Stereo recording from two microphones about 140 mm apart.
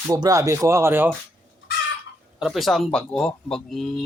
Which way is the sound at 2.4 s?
Centre (ahead or behind).